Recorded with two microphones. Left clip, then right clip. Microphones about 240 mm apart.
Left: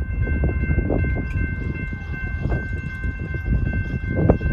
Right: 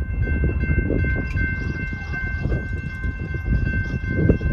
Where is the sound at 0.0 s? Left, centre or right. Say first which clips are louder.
Even; centre.